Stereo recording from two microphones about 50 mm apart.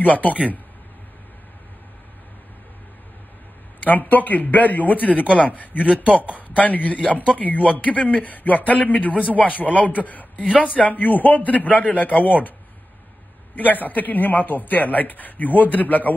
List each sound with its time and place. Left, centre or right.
0.0 s a man's voice: left
3.8 s a man's voice: left
13.7 s a man's voice: left